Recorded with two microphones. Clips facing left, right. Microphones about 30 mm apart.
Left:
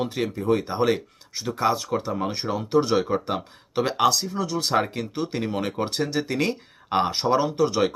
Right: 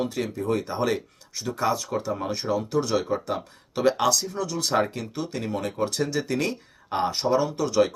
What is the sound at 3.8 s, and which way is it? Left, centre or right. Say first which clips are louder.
Speech: right 1 dB; centre.